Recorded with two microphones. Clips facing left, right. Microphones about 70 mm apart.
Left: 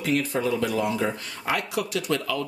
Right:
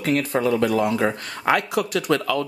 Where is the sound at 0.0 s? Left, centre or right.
Right.